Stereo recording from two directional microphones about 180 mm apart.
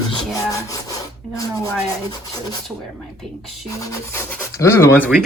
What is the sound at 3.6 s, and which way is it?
Speech, 20° left (ahead or behind).